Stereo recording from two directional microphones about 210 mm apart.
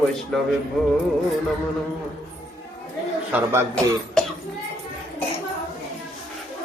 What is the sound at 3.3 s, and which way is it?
Speech, 10° right (ahead or behind).